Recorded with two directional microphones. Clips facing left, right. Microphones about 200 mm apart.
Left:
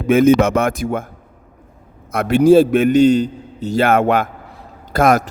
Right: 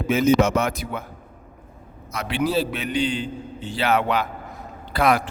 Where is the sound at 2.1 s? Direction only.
45° left (ahead or behind).